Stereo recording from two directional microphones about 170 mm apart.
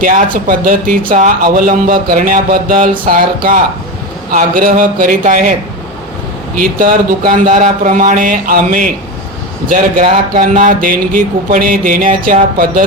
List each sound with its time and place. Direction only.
0.0 s speech: 50° right (ahead or behind)
6.6 s speech: 55° right (ahead or behind)